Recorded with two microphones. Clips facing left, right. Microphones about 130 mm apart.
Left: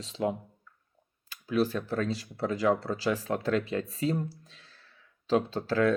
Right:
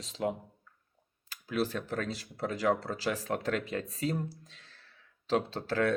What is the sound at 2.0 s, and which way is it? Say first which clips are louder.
Speech: left 6 dB; 40° right (ahead or behind).